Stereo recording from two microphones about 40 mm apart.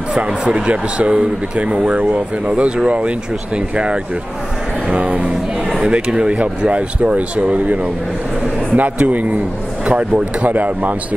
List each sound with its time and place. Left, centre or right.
0.1 s speech: right
9.8 s speech: right
10.4 s speech: right